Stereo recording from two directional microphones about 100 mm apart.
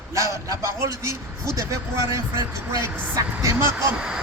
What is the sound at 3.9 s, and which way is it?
Speech, 10° right (ahead or behind).